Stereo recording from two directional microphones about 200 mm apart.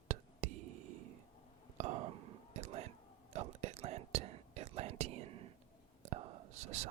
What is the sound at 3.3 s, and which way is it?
Whispering, 35° right (ahead or behind).